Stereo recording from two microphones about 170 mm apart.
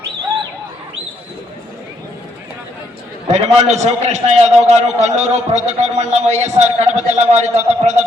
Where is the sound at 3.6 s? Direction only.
40° right (ahead or behind).